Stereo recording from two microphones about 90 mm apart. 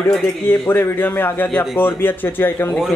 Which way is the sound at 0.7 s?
25° left (ahead or behind).